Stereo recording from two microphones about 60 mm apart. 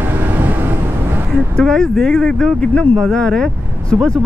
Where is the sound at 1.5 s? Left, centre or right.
Centre.